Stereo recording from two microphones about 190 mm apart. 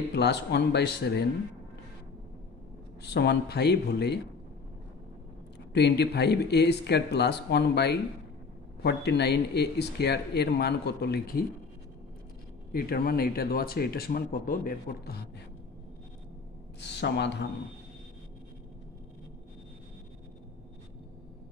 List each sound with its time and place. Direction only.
0.1 s speech: 60° left (ahead or behind)
3.0 s speech: 60° left (ahead or behind)
5.7 s speech: 60° left (ahead or behind)
12.7 s speech: 55° left (ahead or behind)
16.8 s speech: 65° left (ahead or behind)